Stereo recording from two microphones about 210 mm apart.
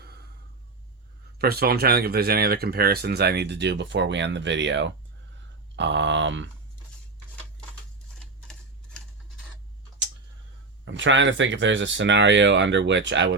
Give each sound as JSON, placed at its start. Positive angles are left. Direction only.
{"t": 0.0, "sound": "a sound", "side_deg": -50}
{"t": 1.4, "sound": "speech", "side_deg": -50}
{"t": 10.8, "sound": "speech", "side_deg": -60}